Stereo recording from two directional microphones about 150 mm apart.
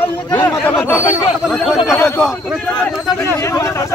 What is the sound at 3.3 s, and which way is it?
Speech, 20° left (ahead or behind).